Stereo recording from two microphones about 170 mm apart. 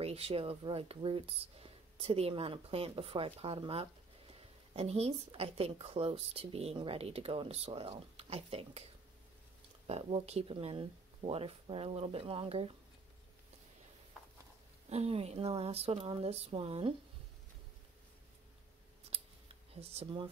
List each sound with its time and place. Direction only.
0.0 s a woman's voice: 35° right (ahead or behind)
9.8 s a woman's voice: 35° right (ahead or behind)
14.9 s a woman's voice: 35° right (ahead or behind)
19.7 s a woman's voice: 35° right (ahead or behind)